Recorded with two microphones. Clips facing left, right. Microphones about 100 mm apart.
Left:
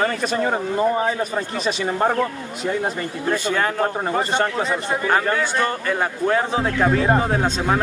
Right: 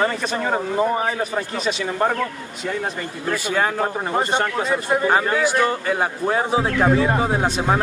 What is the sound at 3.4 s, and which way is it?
A man's voice, 15° right (ahead or behind).